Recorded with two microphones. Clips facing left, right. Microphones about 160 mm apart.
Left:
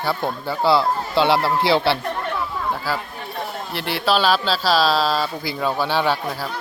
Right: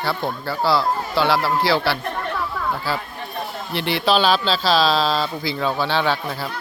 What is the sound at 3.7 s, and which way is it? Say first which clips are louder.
Speech: right 2 dB; 5° left (ahead or behind).